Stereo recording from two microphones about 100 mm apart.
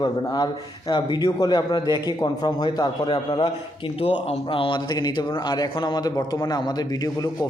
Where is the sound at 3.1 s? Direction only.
55° left (ahead or behind).